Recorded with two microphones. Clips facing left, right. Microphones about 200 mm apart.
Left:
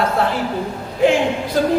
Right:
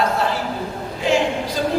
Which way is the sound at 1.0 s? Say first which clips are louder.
Left 4 dB; 55° left (ahead or behind).